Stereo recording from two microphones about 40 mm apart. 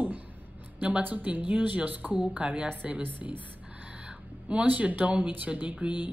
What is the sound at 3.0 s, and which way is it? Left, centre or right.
Speech, right.